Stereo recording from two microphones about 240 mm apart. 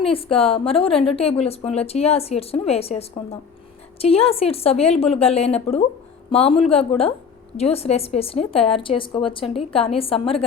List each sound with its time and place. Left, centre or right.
0.0 s a woman's voice: left